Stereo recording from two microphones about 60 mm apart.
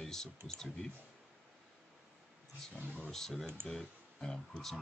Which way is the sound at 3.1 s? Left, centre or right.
Centre.